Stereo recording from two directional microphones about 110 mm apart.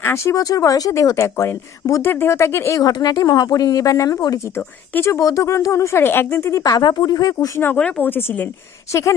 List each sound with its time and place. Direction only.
0.0 s speech: 25° left (ahead or behind)
6.6 s speech: 35° left (ahead or behind)
7.8 s a woman's voice: 10° left (ahead or behind)